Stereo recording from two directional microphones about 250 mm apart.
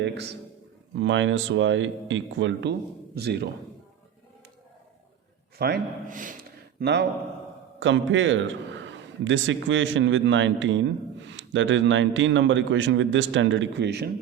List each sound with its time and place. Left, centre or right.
0.0 s a man's voice: right
5.5 s a man's voice: right
6.7 s a man's voice: right